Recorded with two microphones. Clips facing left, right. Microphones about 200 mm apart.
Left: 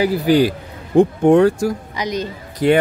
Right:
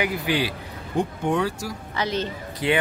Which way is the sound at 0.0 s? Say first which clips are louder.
Left 10 dB; 35° left (ahead or behind).